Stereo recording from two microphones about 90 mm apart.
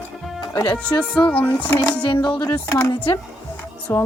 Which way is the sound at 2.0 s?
50° left (ahead or behind).